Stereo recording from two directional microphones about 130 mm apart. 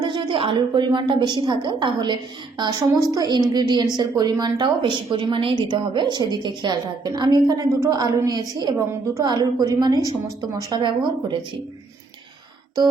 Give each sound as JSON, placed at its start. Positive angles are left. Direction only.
{"t": 0.0, "sound": "a woman's voice", "side_deg": -40}